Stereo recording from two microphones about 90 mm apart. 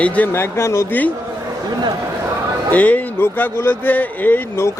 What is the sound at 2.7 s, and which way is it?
A man's voice, 20° left (ahead or behind).